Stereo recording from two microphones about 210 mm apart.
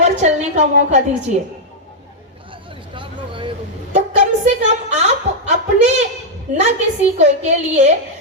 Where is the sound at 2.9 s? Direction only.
25° right (ahead or behind).